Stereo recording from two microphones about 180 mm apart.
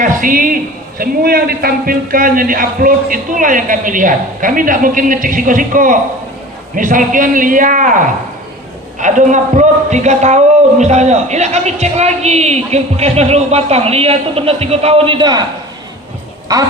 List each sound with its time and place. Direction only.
0.0 s a man's voice: 50° right (ahead or behind)
9.0 s a man's voice: 45° right (ahead or behind); by 15.4 s 25° right (ahead or behind)